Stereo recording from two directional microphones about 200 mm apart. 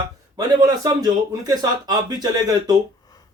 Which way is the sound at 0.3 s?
20° right (ahead or behind).